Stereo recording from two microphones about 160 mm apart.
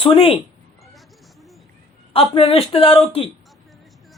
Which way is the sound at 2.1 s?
35° left (ahead or behind).